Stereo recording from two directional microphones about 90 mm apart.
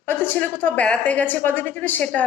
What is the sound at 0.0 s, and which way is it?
A woman's voice, 20° left (ahead or behind).